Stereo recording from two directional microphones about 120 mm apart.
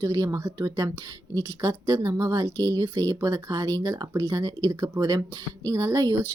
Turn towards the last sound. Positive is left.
turn(degrees=-25)  # may be behind; listen again after turning